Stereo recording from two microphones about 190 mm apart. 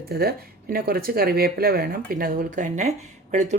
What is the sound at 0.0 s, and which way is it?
Speech, 55° right (ahead or behind).